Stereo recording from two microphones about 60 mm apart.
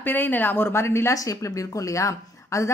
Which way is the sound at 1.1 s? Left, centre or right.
Left.